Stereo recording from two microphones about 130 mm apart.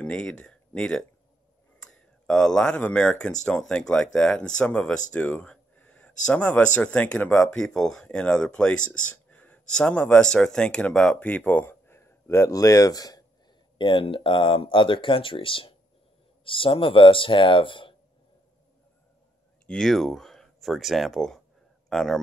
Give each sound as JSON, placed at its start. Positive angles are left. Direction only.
{"t": 0.0, "sound": "speech", "side_deg": 10}
{"t": 19.6, "sound": "speech", "side_deg": 5}